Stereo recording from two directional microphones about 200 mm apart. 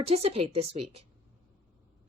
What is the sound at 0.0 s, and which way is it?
A woman's voice, 30° right (ahead or behind).